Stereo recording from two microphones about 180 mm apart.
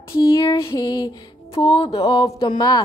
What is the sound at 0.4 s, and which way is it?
Music, 20° left (ahead or behind).